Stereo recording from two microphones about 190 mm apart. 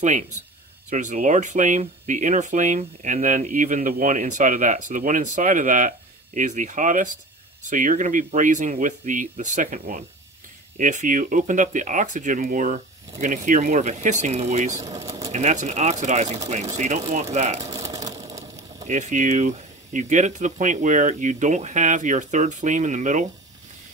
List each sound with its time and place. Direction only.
0.8 s speech: 40° right (ahead or behind)
14.8 s speech: 15° right (ahead or behind)
15.3 s speech: 40° right (ahead or behind)
17.7 s a sound: 15° right (ahead or behind)
18.9 s speech: 40° right (ahead or behind)